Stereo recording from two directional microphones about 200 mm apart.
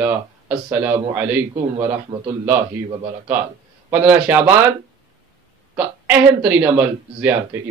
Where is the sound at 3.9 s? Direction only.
10° right (ahead or behind).